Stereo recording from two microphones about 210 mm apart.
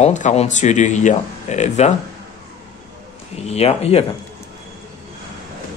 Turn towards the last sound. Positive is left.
turn(degrees=30)  # may be behind; listen again after turning